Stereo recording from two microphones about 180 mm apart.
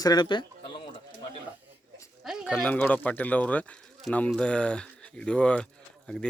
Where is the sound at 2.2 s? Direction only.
5° right (ahead or behind).